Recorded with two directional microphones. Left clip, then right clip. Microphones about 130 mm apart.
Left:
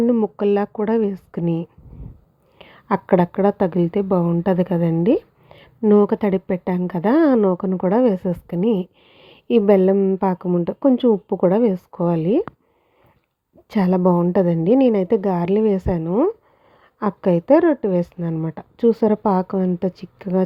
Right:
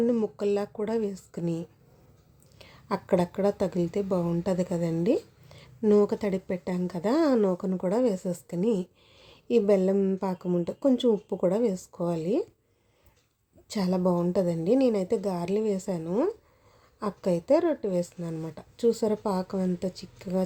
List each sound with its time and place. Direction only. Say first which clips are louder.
0.0 s speech: left 7 dB; 30° left (ahead or behind)
0.3 s a woman's voice: left 9 dB; 45° left (ahead or behind)
13.7 s speech: left 9 dB; 50° left (ahead or behind)
16.0 s a woman's voice: left 8 dB; 30° left (ahead or behind)
17.0 s speech: left 9 dB; 50° left (ahead or behind)